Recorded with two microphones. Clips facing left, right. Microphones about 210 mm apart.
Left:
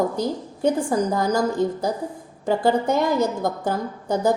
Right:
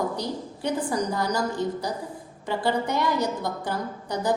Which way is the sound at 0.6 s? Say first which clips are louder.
Left 6 dB; 45° left (ahead or behind).